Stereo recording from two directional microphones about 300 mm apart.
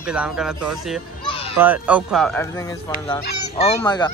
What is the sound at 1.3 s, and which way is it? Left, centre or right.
Children playing, centre.